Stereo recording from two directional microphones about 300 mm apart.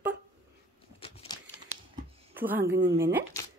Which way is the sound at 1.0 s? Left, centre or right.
Centre.